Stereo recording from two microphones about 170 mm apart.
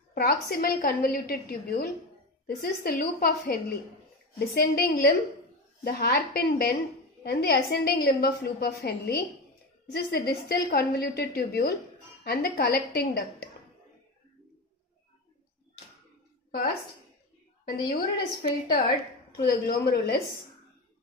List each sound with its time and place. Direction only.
0.1 s a woman's voice: 65° left (ahead or behind)
4.6 s a woman's voice: 65° left (ahead or behind)
17.9 s a woman's voice: 65° left (ahead or behind)